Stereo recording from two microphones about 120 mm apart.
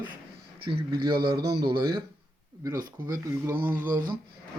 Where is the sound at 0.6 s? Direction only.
40° right (ahead or behind).